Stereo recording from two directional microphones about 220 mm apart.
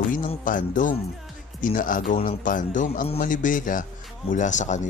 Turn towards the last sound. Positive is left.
turn(degrees=35)  # may be behind; listen again after turning